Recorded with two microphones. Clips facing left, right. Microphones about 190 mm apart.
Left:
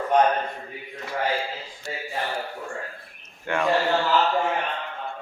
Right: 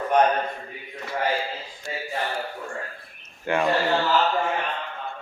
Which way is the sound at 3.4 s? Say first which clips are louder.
Right 2 dB; 10° right (ahead or behind).